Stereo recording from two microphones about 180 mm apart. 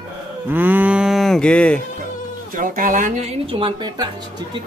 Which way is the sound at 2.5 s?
50° right (ahead or behind).